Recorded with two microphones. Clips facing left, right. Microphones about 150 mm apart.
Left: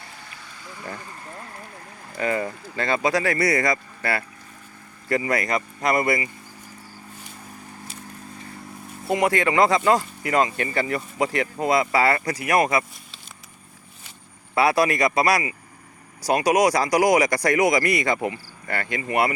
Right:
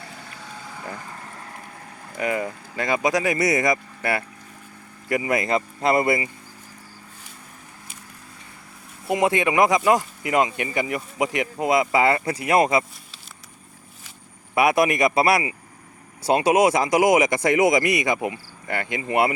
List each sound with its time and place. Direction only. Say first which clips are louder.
2.1 s speech: even; 10° right (ahead or behind)
9.0 s speech: even; 20° right (ahead or behind)
14.5 s speech: right 1 dB; 20° right (ahead or behind)